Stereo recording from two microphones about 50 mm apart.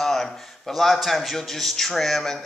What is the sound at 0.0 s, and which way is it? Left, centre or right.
A man's voice, centre.